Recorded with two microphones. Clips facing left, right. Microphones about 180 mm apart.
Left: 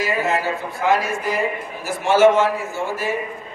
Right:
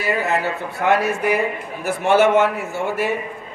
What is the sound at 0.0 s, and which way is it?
A man's voice, 60° right (ahead or behind).